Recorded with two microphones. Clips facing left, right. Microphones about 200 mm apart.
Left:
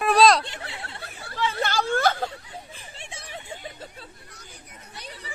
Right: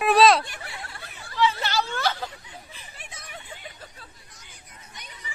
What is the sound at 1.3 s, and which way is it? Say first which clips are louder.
Hubbub: right 2 dB; 50° left (ahead or behind).